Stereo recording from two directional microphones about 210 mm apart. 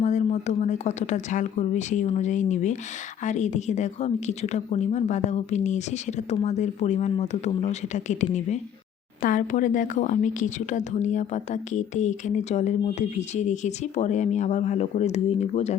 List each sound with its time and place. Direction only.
0.0 s a woman's voice: 35° left (ahead or behind)